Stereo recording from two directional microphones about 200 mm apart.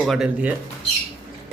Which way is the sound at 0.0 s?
Centre (ahead or behind).